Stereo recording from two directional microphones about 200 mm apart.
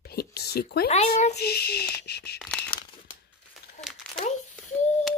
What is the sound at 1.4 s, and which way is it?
Speech, 55° left (ahead or behind).